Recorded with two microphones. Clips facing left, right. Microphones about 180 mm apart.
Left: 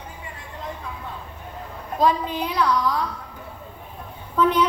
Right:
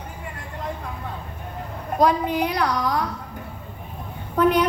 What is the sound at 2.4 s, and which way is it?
Speech, 65° right (ahead or behind).